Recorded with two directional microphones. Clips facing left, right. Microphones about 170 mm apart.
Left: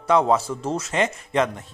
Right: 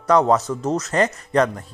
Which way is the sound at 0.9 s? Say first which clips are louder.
Right 3 dB; 5° left (ahead or behind).